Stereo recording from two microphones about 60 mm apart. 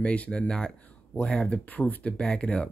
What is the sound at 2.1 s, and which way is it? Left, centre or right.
Speech, centre.